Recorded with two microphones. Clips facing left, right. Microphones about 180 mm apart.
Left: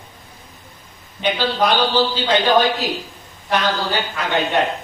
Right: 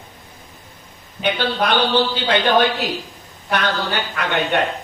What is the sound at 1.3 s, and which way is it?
A man's voice, 60° right (ahead or behind).